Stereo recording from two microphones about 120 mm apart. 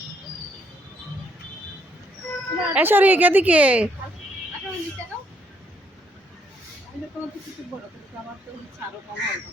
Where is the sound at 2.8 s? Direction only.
15° right (ahead or behind).